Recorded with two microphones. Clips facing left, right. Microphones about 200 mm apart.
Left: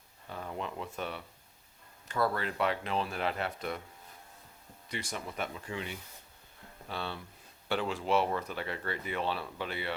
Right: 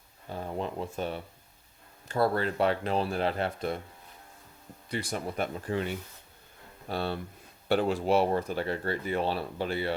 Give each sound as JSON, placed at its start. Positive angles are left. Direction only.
{"t": 0.3, "sound": "speech", "side_deg": -35}
{"t": 4.9, "sound": "speech", "side_deg": -35}